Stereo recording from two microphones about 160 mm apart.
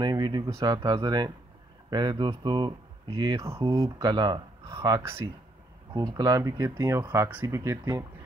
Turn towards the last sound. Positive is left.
turn(degrees=-20)  # may be behind; listen again after turning